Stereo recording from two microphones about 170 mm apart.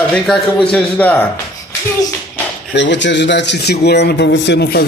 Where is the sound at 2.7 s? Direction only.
90° left.